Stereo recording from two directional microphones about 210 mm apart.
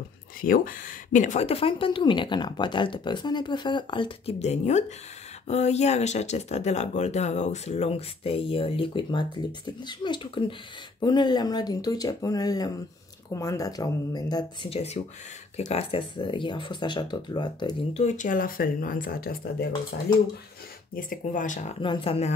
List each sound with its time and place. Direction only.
0.4 s speech: 40° left (ahead or behind); by 18.0 s 20° left (ahead or behind)
18.0 s speech: 35° left (ahead or behind)
20.9 s speech: 40° left (ahead or behind)
21.8 s speech: 25° left (ahead or behind)